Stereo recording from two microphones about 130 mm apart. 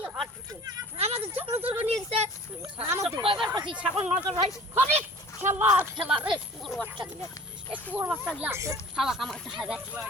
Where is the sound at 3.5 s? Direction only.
35° right (ahead or behind).